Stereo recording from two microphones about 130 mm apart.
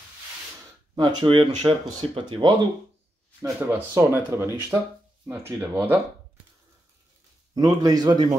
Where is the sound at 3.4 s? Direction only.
15° right (ahead or behind).